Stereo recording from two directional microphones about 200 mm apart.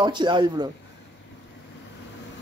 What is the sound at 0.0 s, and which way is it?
Speech, 20° right (ahead or behind).